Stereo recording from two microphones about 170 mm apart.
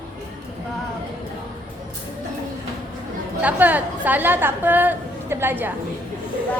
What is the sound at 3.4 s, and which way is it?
A woman's voice, 10° right (ahead or behind).